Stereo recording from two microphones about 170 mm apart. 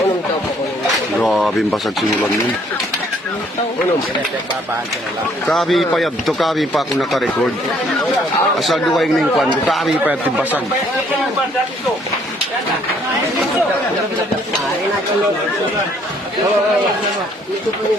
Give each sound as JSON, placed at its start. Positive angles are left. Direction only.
{"t": 1.2, "sound": "speech", "side_deg": 0}
{"t": 5.5, "sound": "speech", "side_deg": 0}
{"t": 8.5, "sound": "speech", "side_deg": 0}